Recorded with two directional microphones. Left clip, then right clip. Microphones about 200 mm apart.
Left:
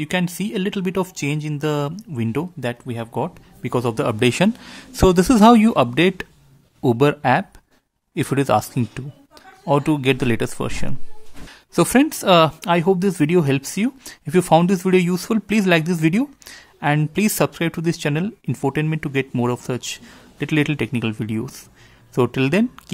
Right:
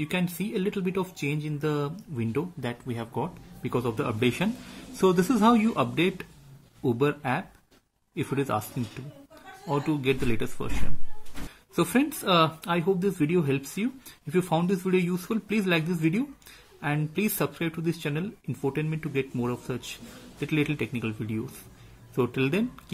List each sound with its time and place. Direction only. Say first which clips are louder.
0.0 s speech: left 7 dB; 40° left (ahead or behind)